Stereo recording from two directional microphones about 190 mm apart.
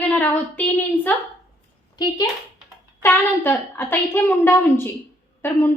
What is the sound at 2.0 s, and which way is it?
A woman's voice, 20° left (ahead or behind).